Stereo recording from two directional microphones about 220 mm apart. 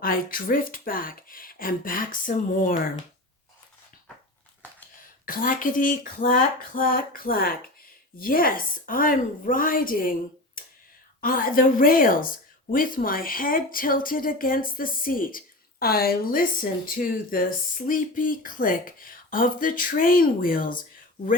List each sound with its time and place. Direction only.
0.0 s a woman's voice: 40° left (ahead or behind)
5.2 s a woman's voice: 40° left (ahead or behind)